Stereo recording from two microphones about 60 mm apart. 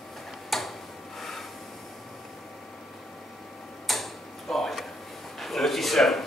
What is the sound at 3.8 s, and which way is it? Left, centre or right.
Tick-tock, centre.